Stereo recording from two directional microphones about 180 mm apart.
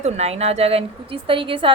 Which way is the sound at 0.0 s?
35° right (ahead or behind).